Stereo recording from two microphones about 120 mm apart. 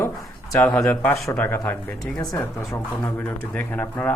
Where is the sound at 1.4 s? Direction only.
20° left (ahead or behind).